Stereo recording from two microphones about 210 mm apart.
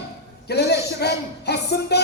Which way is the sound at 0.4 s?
50° left (ahead or behind).